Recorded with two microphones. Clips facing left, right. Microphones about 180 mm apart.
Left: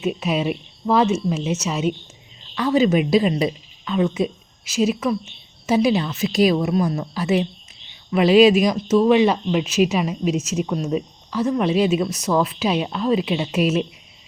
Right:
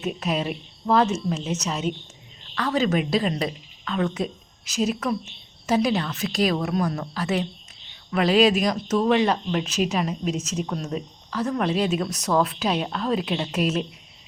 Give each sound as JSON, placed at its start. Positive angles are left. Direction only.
{"t": 0.0, "sound": "a woman's voice", "side_deg": 5}